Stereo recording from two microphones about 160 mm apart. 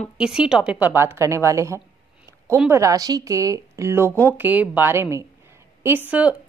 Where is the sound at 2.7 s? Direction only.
20° right (ahead or behind).